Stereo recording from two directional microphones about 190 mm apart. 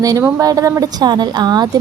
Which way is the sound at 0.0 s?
15° right (ahead or behind).